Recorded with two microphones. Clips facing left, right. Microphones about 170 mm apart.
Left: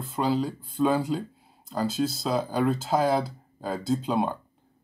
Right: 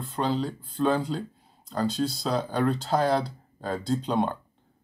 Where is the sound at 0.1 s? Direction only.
10° left (ahead or behind).